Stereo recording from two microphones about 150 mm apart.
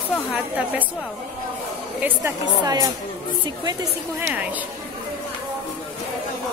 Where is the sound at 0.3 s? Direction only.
5° right (ahead or behind).